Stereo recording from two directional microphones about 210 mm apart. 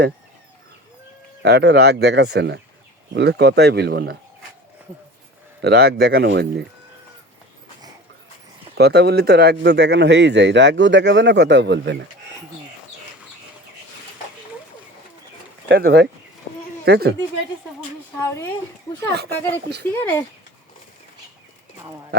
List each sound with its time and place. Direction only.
1.4 s speech: 55° right (ahead or behind)
5.6 s speech: 50° right (ahead or behind)
8.7 s speech: 50° right (ahead or behind)
15.7 s speech: 50° right (ahead or behind)
19.1 s speech: 50° right (ahead or behind)